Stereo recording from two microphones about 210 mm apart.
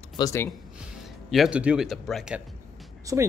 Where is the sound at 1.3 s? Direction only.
5° right (ahead or behind).